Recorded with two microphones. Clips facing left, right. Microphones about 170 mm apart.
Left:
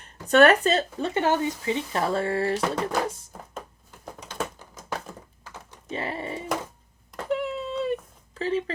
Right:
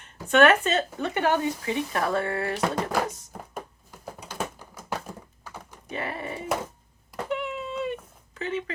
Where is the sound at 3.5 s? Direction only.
10° right (ahead or behind).